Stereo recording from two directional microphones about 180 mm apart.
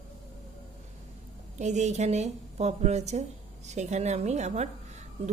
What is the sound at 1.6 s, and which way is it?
A woman's voice, 40° right (ahead or behind).